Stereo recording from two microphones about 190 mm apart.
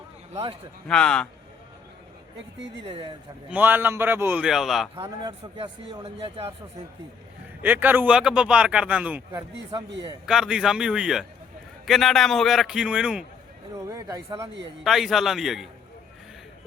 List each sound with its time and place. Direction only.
0.9 s a man's voice: 5° left (ahead or behind)
2.8 s a man's voice: 30° right (ahead or behind)
3.5 s speech: 10° right (ahead or behind)
4.9 s a man's voice: 25° right (ahead or behind)
7.6 s speech: 10° right (ahead or behind)
10.2 s a man's voice: 5° right (ahead or behind)
13.7 s speech: 15° right (ahead or behind)
14.8 s a man's voice: centre (ahead or behind)